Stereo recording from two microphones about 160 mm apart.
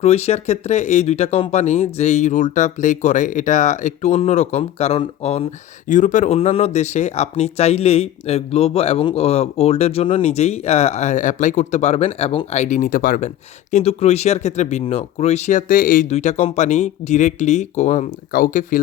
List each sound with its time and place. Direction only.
0.0 s speech: 40° left (ahead or behind)
5.9 s speech: 50° left (ahead or behind)
18.3 s speech: 60° left (ahead or behind)